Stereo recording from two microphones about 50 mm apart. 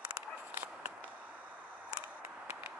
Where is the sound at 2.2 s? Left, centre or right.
Right.